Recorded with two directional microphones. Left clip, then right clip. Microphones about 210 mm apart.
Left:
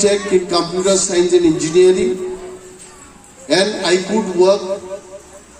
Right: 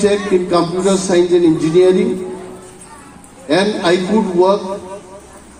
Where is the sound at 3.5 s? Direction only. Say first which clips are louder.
Right 1 dB; 55° left (ahead or behind).